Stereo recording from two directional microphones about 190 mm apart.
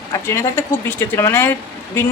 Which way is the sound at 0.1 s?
15° left (ahead or behind).